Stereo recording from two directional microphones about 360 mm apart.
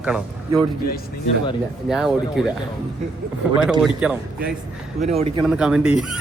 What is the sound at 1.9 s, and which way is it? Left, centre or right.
Speech, centre.